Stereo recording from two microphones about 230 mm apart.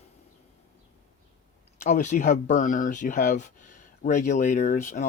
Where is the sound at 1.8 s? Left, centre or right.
Left.